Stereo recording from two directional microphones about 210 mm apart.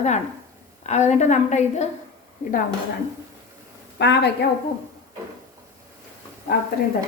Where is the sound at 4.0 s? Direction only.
55° left (ahead or behind).